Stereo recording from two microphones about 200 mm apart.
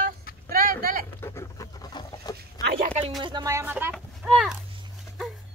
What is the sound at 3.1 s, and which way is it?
Speech, 20° right (ahead or behind).